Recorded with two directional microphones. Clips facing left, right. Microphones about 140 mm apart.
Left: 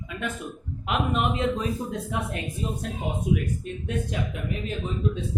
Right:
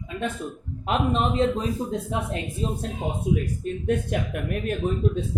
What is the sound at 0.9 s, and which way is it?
A man's voice, 35° right (ahead or behind).